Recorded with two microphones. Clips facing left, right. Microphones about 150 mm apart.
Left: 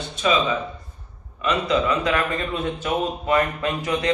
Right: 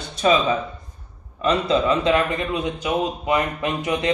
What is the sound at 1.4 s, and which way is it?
A man's voice, 30° right (ahead or behind).